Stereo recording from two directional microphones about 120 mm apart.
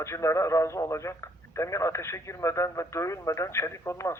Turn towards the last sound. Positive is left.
turn(degrees=25)  # may be behind; listen again after turning